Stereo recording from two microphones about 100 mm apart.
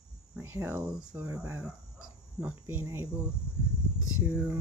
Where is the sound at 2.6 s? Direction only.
25° right (ahead or behind).